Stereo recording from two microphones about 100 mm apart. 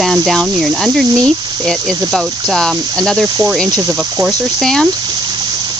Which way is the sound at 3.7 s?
35° right (ahead or behind).